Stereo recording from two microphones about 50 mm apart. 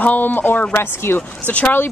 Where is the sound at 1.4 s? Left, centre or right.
Left.